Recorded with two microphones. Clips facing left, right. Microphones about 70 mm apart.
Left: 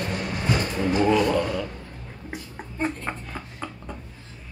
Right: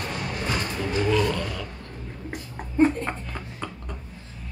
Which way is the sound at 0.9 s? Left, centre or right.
Centre.